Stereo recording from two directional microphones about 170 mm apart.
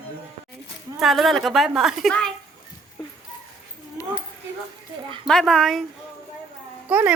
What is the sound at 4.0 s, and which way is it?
Dog, 20° left (ahead or behind).